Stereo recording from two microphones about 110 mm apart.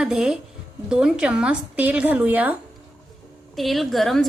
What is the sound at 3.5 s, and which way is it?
Speech, centre (ahead or behind).